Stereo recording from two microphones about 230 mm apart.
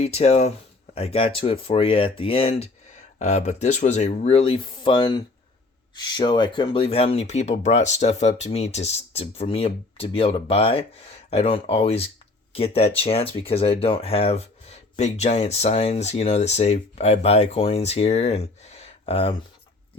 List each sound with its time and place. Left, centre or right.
0.0 s speech: left